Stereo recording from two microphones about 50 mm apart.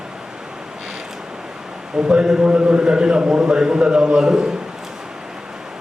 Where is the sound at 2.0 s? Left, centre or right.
Centre.